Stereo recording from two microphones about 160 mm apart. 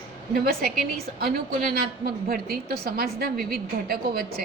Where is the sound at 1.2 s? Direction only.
70° right (ahead or behind).